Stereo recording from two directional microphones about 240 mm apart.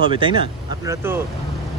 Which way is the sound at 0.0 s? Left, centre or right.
Right.